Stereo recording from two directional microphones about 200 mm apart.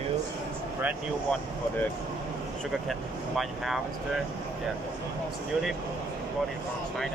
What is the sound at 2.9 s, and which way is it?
Speech, centre (ahead or behind).